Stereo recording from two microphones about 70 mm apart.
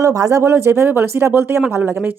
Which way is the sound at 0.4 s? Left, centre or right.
Right.